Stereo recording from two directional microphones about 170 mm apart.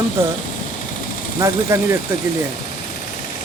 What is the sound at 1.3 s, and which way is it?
Speech, 15° right (ahead or behind).